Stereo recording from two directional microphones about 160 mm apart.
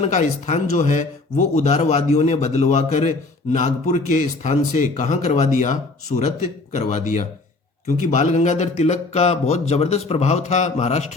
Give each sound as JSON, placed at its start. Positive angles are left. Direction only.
{"t": 0.0, "sound": "a man's voice", "side_deg": 50}